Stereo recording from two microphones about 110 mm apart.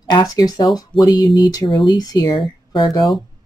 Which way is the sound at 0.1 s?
35° left (ahead or behind).